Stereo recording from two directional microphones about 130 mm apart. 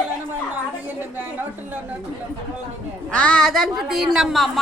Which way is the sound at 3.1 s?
10° left (ahead or behind).